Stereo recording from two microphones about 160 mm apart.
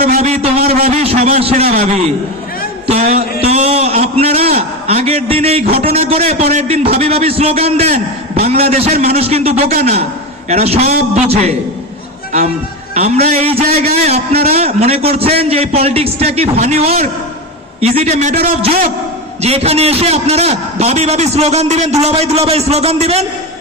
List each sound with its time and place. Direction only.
0.2 s a man's voice: 40° right (ahead or behind)
12.9 s a man's voice: 45° right (ahead or behind)
19.4 s a man's voice: 40° right (ahead or behind)